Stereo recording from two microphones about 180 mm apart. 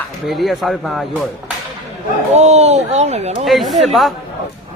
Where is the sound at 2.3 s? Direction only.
40° right (ahead or behind).